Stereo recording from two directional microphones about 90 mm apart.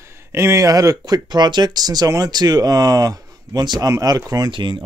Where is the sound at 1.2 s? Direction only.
55° right (ahead or behind).